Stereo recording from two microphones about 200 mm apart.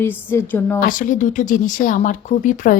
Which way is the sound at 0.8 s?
45° left (ahead or behind).